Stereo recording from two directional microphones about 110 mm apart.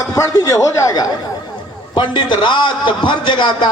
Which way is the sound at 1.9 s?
45° left (ahead or behind).